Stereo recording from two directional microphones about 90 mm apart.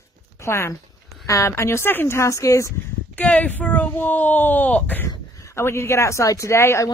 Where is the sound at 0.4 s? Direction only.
30° left (ahead or behind).